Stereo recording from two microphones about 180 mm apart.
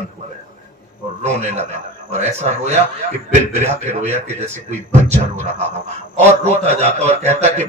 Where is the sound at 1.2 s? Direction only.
40° right (ahead or behind).